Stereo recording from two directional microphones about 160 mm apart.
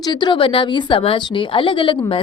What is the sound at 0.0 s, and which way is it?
A woman's voice, 30° left (ahead or behind).